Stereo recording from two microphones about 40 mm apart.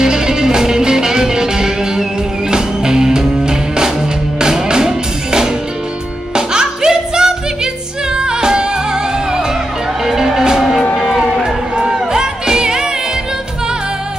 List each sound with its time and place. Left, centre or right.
0.0 s music: centre